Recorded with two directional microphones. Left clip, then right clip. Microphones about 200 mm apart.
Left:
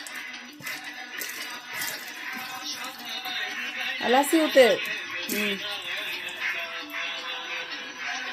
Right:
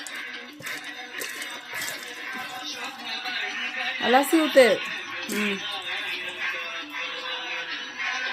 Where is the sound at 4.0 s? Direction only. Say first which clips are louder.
Right 1 dB; centre (ahead or behind).